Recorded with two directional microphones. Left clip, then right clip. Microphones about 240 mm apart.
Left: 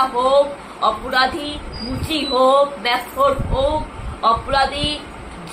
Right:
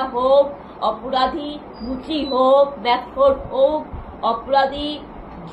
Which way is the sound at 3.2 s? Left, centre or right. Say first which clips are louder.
Right 1 dB; left.